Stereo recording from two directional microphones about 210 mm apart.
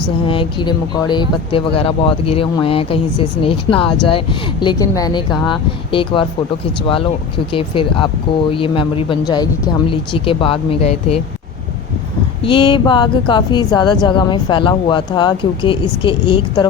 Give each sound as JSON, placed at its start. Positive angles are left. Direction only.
{"t": 0.3, "sound": "speech", "side_deg": 25}
{"t": 7.5, "sound": "speech", "side_deg": 25}
{"t": 12.4, "sound": "speech", "side_deg": 25}